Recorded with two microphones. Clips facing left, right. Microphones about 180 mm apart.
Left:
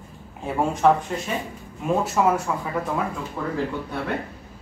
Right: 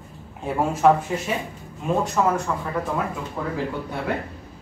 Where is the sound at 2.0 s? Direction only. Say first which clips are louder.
Even; 5° left (ahead or behind).